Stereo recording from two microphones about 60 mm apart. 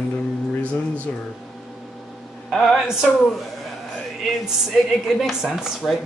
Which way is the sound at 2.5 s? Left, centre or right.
Centre.